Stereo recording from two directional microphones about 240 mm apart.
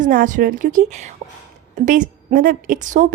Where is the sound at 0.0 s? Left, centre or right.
Right.